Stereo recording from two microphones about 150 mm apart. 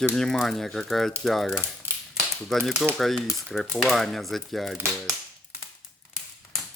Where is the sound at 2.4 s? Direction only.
Centre (ahead or behind).